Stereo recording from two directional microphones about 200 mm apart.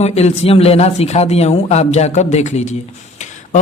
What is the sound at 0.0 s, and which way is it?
Speech, 30° left (ahead or behind).